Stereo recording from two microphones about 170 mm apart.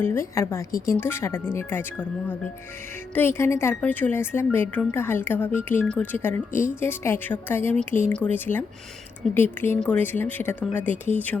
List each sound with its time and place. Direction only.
0.0 s speech: 15° left (ahead or behind)